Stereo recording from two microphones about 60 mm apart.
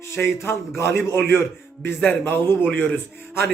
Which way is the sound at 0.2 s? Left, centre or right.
Left.